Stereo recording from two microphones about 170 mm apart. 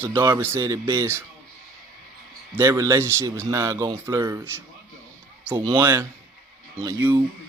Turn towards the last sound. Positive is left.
turn(degrees=-15)  # may be behind; listen again after turning